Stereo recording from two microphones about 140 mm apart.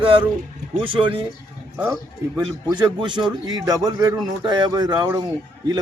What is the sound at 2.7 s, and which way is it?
A man's voice, 35° right (ahead or behind).